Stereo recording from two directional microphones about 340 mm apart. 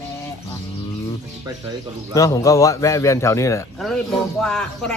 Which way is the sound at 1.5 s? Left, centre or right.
Centre.